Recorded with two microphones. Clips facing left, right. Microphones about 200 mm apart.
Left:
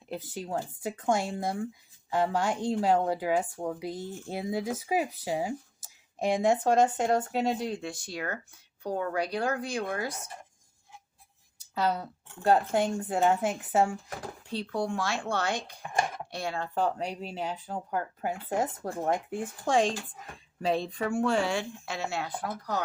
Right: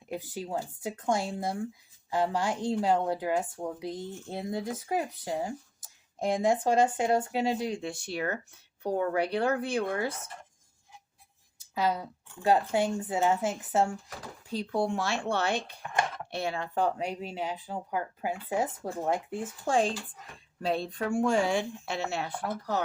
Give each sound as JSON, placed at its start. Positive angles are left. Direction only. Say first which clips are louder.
{"t": 0.1, "sound": "speech", "louder": "even", "side_deg": -10}
{"t": 7.8, "sound": "a woman's voice", "louder": "right 3 dB", "side_deg": -25}
{"t": 11.7, "sound": "speech", "louder": "even", "side_deg": -10}
{"t": 14.7, "sound": "a woman's voice", "louder": "right 2 dB", "side_deg": -25}
{"t": 16.3, "sound": "speech", "louder": "right 2 dB", "side_deg": -20}
{"t": 17.4, "sound": "speech", "louder": "left 2 dB", "side_deg": -5}
{"t": 21.1, "sound": "a woman's voice", "louder": "right 1 dB", "side_deg": -15}